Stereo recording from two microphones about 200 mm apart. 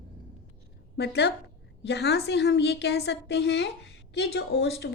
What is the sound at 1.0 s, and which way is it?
A woman's voice, 55° left (ahead or behind).